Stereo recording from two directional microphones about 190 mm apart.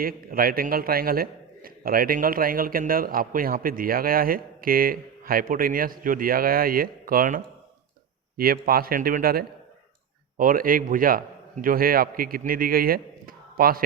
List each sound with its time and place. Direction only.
0.0 s a man's voice: 50° right (ahead or behind)